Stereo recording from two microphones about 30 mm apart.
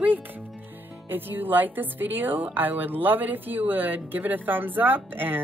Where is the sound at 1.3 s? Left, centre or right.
Right.